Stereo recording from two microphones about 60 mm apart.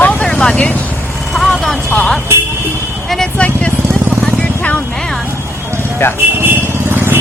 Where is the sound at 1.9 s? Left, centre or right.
Centre.